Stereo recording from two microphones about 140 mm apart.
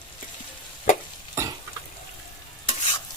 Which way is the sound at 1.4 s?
20° right (ahead or behind).